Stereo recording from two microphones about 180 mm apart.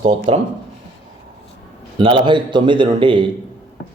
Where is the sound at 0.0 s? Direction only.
30° right (ahead or behind).